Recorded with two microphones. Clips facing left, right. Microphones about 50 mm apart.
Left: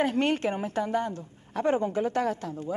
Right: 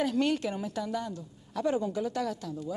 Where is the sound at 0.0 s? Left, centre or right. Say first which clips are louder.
Left 3 dB; left.